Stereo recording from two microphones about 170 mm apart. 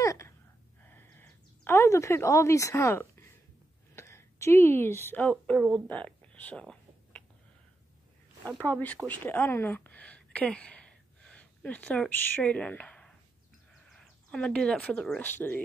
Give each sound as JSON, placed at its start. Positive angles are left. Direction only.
{"t": 0.0, "sound": "gasp", "side_deg": 20}
{"t": 0.8, "sound": "a sound", "side_deg": 10}
{"t": 8.6, "sound": "a woman's voice", "side_deg": 10}